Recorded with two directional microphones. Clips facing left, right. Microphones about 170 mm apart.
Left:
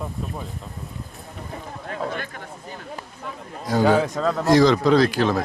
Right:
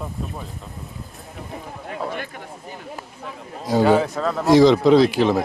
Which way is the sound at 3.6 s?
Centre (ahead or behind).